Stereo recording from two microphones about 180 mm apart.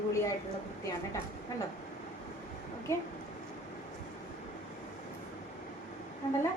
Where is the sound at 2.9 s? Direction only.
15° left (ahead or behind).